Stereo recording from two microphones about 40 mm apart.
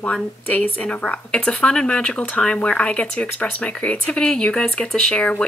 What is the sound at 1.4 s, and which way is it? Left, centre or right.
Speech, left.